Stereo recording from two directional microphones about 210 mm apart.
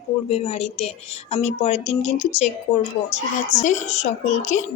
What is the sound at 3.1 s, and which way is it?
Speech, 35° left (ahead or behind).